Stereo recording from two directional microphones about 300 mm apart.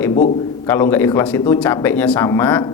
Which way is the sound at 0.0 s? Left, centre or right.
Centre.